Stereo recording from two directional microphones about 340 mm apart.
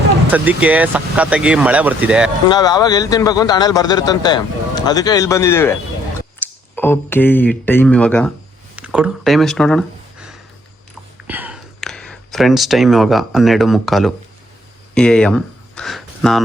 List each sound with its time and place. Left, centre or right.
0.3 s speech: centre
2.5 s a man's voice: centre
6.7 s speech: centre
8.7 s a sound: centre
11.3 s speech: centre